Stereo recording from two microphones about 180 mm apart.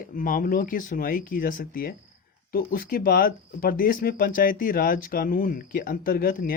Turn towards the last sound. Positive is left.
turn(degrees=50)  # may be behind; listen again after turning